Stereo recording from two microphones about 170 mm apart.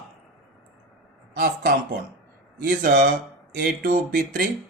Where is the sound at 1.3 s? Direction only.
55° right (ahead or behind).